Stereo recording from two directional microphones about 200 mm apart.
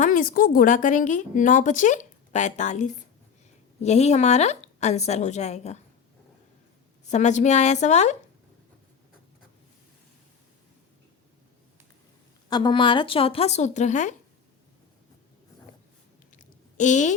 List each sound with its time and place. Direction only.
0.0 s a woman's voice: 45° left (ahead or behind)
7.1 s a woman's voice: 35° left (ahead or behind)
12.5 s speech: 20° left (ahead or behind); by 14.2 s 35° left (ahead or behind)
16.3 s a sound: 35° left (ahead or behind)